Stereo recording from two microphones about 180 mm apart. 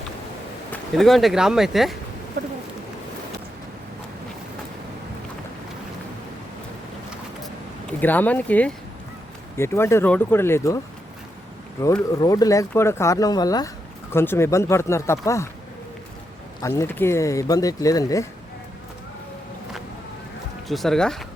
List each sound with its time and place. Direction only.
0.7 s speech: centre (ahead or behind)
8.0 s speech: 10° left (ahead or behind)
11.8 s speech: 15° left (ahead or behind)
16.6 s speech: 15° left (ahead or behind)
20.7 s speech: centre (ahead or behind)